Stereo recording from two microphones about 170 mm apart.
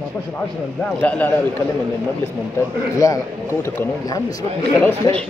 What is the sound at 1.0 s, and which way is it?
Speech, 10° left (ahead or behind).